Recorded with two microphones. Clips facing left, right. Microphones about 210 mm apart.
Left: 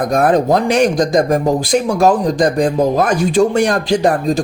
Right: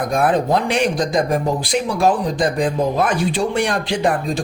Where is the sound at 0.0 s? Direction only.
40° left (ahead or behind).